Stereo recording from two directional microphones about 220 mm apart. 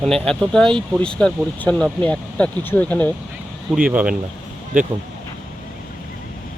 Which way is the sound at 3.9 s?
5° right (ahead or behind).